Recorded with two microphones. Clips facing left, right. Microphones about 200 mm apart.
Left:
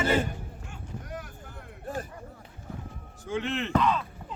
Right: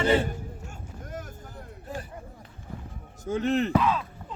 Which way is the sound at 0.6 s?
45° right (ahead or behind).